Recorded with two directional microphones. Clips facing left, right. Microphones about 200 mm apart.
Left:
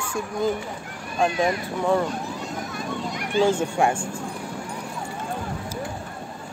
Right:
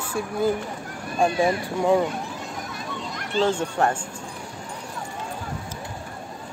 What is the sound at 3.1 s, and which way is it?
Speech, 10° left (ahead or behind).